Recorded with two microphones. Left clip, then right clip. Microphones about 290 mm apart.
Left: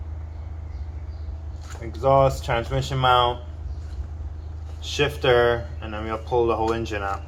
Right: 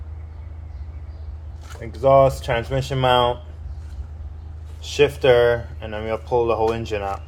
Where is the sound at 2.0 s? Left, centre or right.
Right.